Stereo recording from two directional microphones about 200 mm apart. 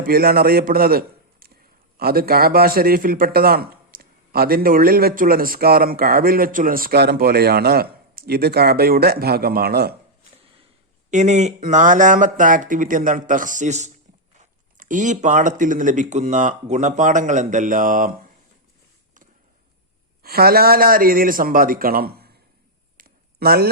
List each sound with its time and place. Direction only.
0.0 s a man's voice: 50° right (ahead or behind)
11.1 s speech: 35° right (ahead or behind)
20.2 s a man's voice: 50° right (ahead or behind)
23.0 s a sound: 50° right (ahead or behind)